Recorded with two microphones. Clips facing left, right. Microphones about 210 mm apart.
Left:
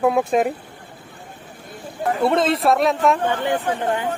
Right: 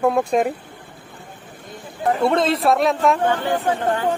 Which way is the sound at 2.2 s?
Centre (ahead or behind).